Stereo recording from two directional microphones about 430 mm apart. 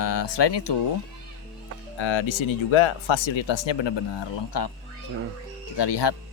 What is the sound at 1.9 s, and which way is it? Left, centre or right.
Speech, left.